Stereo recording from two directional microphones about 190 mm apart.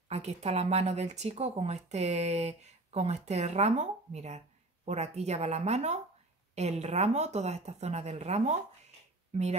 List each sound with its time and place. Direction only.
0.1 s speech: 35° right (ahead or behind)